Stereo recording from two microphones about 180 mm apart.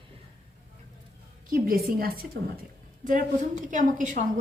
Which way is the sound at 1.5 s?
55° right (ahead or behind).